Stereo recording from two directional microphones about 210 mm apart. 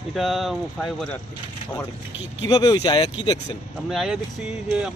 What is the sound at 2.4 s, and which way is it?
Speech, 20° left (ahead or behind).